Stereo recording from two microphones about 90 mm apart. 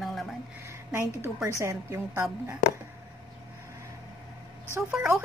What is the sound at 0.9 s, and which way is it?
A woman's voice, 30° right (ahead or behind).